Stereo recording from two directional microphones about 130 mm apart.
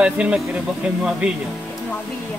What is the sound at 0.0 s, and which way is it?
Speech, 10° right (ahead or behind).